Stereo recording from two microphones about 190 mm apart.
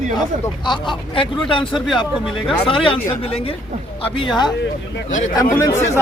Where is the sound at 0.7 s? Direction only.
25° left (ahead or behind).